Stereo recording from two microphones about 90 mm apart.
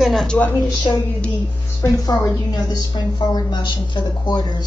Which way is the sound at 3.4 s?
55° left (ahead or behind).